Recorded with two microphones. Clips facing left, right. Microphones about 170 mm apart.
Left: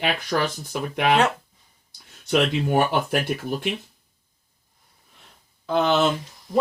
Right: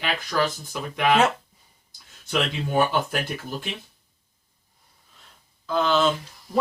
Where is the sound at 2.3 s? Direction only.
60° left (ahead or behind).